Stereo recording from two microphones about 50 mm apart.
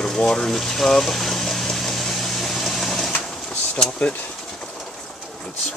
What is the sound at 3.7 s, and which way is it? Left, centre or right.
Speech, centre.